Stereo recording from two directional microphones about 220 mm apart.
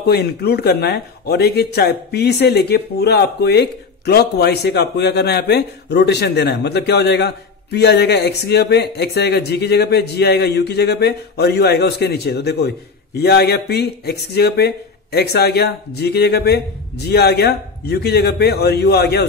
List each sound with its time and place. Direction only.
0.0 s speech: 45° left (ahead or behind)